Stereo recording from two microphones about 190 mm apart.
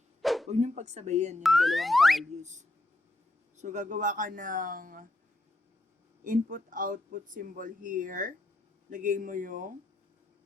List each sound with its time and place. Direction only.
0.2 s bow-wow: centre (ahead or behind)
0.4 s speech: 35° right (ahead or behind)
1.4 s a sound: centre (ahead or behind)
2.4 s speech: 40° right (ahead or behind)
6.2 s speech: 45° right (ahead or behind)